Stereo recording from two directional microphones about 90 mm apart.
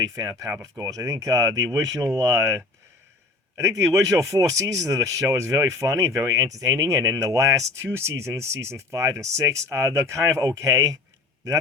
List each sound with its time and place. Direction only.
0.0 s speech: 40° right (ahead or behind)